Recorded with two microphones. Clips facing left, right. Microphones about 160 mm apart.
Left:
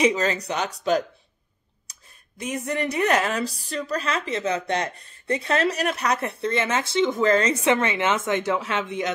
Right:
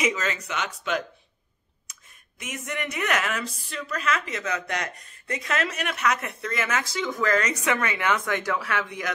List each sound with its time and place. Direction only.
0.0 s speech: 35° left (ahead or behind)